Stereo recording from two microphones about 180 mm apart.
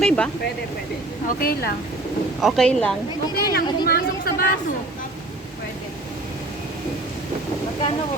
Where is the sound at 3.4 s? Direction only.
60° left (ahead or behind).